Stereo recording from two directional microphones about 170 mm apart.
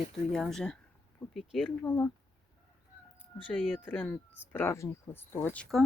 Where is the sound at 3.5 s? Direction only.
5° left (ahead or behind).